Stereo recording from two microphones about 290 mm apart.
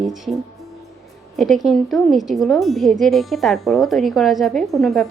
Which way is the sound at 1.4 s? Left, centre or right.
Centre.